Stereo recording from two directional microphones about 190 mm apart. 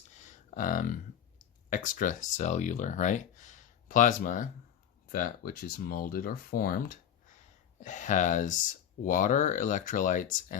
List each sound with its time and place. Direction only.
0.1 s a sound: 40° left (ahead or behind)
1.7 s speech: 45° left (ahead or behind)
7.8 s speech: 40° left (ahead or behind)